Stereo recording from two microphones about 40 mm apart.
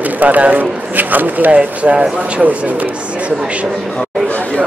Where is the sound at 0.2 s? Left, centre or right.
Right.